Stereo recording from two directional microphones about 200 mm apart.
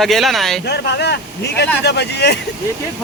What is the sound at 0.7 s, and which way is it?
Speech, 55° left (ahead or behind).